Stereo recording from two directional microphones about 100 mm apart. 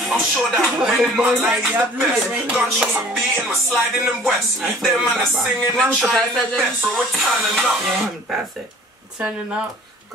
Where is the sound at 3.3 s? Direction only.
20° right (ahead or behind).